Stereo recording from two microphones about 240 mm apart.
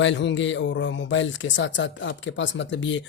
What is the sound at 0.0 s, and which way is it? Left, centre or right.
Speech, left.